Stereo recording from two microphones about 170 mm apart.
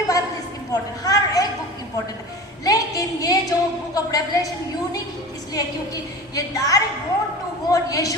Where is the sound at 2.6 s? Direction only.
20° left (ahead or behind).